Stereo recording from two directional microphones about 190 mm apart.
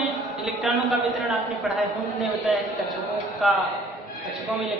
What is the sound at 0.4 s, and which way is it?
Speech, centre (ahead or behind).